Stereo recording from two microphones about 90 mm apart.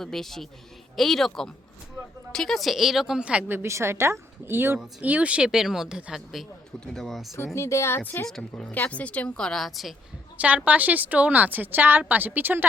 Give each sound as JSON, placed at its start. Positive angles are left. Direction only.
{"t": 0.0, "sound": "a woman's voice", "side_deg": 5}
{"t": 3.5, "sound": "speech", "side_deg": -30}
{"t": 4.8, "sound": "speech", "side_deg": -15}
{"t": 6.7, "sound": "a woman's voice", "side_deg": 5}
{"t": 7.3, "sound": "speech", "side_deg": 30}
{"t": 8.3, "sound": "a woman's voice", "side_deg": 10}
{"t": 10.4, "sound": "speech", "side_deg": -15}